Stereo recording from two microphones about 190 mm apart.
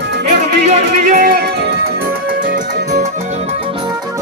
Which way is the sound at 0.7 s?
50° right (ahead or behind).